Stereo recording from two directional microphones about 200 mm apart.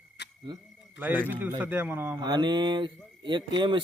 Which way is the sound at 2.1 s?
20° right (ahead or behind).